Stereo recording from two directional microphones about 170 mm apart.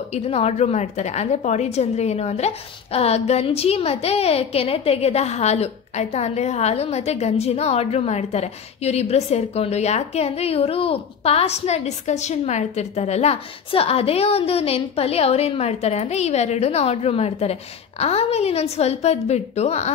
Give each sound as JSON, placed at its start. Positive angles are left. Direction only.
{"t": 0.1, "sound": "a woman's voice", "side_deg": 40}